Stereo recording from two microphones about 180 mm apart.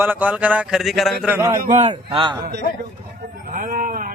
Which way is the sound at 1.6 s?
40° right (ahead or behind).